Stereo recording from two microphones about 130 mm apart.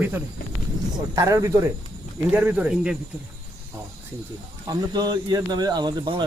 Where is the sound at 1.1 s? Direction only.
25° right (ahead or behind).